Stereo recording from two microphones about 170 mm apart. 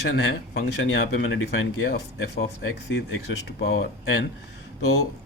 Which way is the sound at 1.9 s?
80° left.